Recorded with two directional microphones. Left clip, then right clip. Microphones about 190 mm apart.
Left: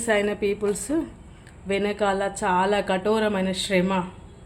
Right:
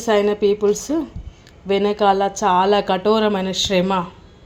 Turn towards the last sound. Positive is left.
turn(degrees=-25)  # may be behind; listen again after turning